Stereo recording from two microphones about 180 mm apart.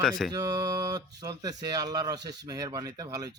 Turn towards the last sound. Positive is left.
turn(degrees=-20)  # may be behind; listen again after turning